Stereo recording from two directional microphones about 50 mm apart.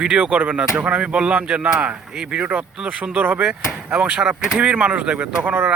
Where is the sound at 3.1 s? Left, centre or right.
Right.